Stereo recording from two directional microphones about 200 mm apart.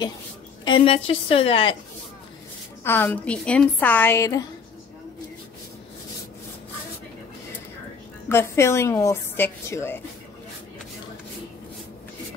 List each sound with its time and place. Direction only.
0.7 s a woman's voice: 25° left (ahead or behind)
2.8 s a woman's voice: 10° left (ahead or behind)
8.3 s a woman's voice: 10° left (ahead or behind)